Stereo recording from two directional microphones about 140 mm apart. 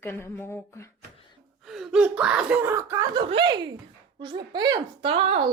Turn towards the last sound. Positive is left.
turn(degrees=-40)  # may be behind; listen again after turning